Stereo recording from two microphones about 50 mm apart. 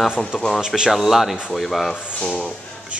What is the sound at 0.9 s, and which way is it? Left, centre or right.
Speech, centre.